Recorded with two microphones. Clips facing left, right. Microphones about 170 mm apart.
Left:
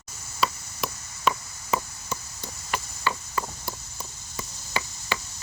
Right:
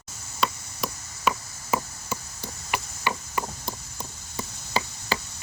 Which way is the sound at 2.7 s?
15° right (ahead or behind).